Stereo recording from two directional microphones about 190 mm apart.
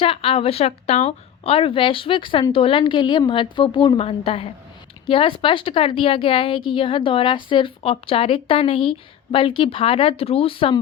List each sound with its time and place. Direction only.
0.0 s speech: 30° left (ahead or behind)